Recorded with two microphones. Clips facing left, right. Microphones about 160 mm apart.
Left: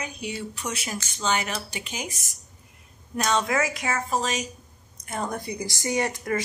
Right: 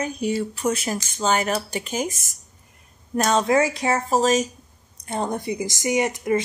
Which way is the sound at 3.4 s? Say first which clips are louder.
Right 6 dB; 30° right (ahead or behind).